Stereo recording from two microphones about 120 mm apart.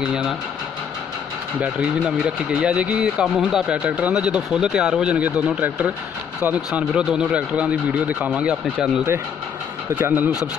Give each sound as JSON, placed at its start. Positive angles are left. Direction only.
{"t": 0.0, "sound": "speech", "side_deg": -5}
{"t": 1.6, "sound": "speech", "side_deg": -5}
{"t": 9.9, "sound": "speech", "side_deg": -15}